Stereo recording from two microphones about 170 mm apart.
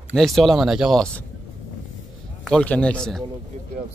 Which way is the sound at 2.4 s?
5° left (ahead or behind).